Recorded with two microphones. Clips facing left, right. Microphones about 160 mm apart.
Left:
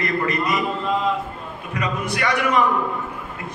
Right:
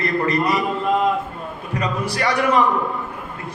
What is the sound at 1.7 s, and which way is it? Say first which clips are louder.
Speech: right 1 dB; 35° right (ahead or behind).